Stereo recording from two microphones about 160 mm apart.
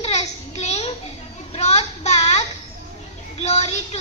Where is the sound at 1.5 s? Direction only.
45° left (ahead or behind).